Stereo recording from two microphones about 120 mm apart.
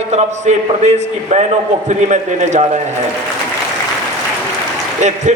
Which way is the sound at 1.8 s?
80° right.